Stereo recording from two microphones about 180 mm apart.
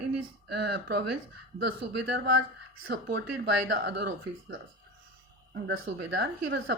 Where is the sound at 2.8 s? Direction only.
60° right (ahead or behind).